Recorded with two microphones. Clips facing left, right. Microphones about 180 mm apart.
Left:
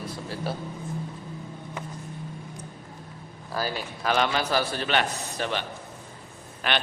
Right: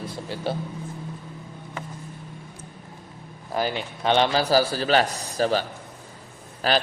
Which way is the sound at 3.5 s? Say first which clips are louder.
Right 4 dB; 20° right (ahead or behind).